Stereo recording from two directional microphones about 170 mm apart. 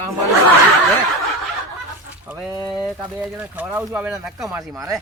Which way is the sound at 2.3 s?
15° right (ahead or behind).